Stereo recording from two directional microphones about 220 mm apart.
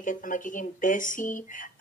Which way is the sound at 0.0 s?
35° left (ahead or behind).